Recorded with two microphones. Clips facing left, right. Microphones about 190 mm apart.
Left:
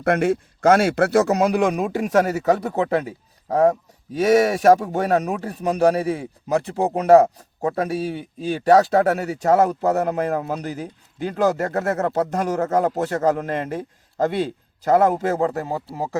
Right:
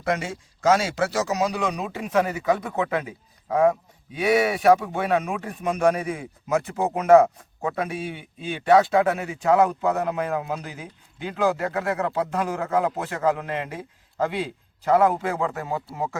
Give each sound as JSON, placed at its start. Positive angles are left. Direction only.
{"t": 0.0, "sound": "speech", "side_deg": 60}